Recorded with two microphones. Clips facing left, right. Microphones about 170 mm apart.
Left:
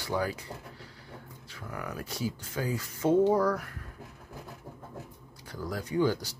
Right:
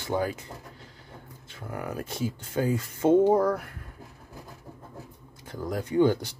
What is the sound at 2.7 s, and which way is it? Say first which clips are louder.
Speech: right 6 dB; 55° right (ahead or behind).